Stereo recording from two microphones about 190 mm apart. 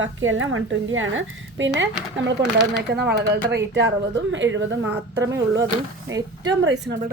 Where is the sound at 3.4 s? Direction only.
65° right (ahead or behind).